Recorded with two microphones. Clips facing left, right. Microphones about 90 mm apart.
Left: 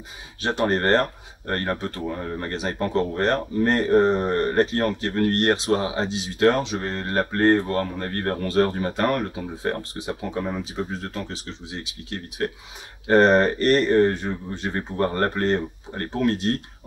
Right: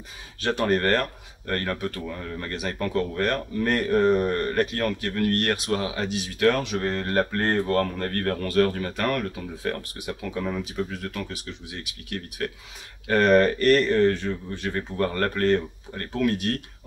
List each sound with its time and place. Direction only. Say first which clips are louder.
0.4 s speech: left 1 dB; 30° left (ahead or behind)